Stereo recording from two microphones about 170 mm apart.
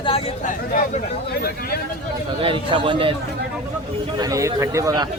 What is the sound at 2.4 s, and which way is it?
Speech, 30° right (ahead or behind).